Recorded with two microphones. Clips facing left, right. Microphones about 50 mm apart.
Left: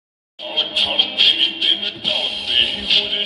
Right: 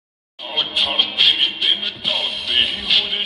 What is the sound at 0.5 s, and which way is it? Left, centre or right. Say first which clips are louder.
Music: even; left.